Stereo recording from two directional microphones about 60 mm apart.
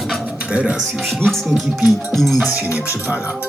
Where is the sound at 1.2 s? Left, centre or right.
Centre.